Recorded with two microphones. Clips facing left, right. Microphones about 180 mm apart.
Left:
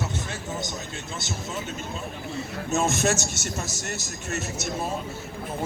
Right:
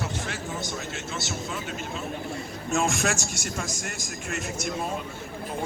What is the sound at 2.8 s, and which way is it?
Speech, centre (ahead or behind).